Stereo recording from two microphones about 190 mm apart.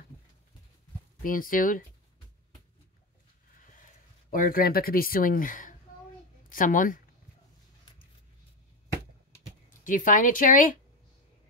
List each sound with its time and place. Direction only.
1.2 s speech: 45° left (ahead or behind)
4.3 s speech: 50° left (ahead or behind)
9.8 s speech: 45° left (ahead or behind)